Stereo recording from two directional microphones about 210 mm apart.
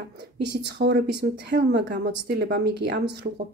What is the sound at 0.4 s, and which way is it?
Speech, 55° right (ahead or behind).